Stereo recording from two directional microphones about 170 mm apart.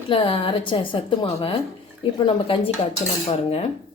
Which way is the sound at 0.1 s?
30° left (ahead or behind).